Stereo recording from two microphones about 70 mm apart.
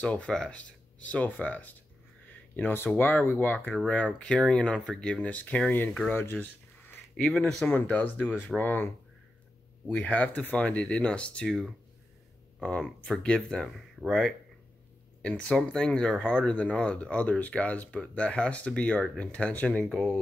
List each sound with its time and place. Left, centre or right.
0.0 s speech: centre
3.8 s speech: centre
6.0 s a sound: left
7.2 s speech: centre
7.6 s speech: left
9.9 s speech: left
11.4 s speech: centre
12.8 s speech: centre
15.2 s speech: centre